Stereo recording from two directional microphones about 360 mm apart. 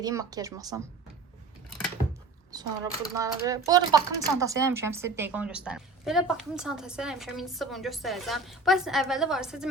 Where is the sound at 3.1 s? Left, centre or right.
Centre.